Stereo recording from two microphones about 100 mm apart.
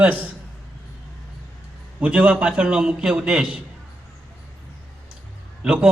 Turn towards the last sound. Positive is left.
turn(degrees=-10)  # may be behind; listen again after turning